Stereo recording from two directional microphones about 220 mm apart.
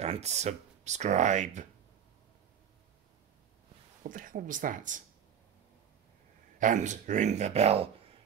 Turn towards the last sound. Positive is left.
turn(degrees=-25)  # may be behind; listen again after turning